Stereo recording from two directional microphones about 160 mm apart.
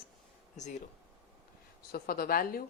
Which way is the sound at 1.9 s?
70° left (ahead or behind).